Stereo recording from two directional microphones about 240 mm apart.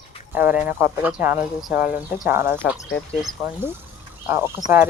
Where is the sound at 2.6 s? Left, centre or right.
Centre.